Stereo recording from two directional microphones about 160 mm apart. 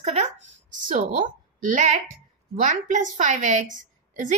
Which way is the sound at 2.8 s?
50° right (ahead or behind).